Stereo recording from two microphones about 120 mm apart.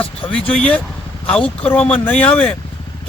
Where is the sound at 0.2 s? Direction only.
10° left (ahead or behind).